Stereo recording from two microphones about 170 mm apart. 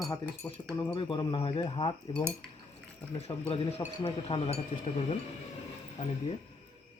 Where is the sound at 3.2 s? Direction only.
35° left (ahead or behind).